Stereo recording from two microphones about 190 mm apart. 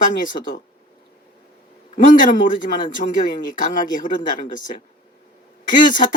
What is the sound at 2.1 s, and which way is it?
A man's voice, 45° left (ahead or behind).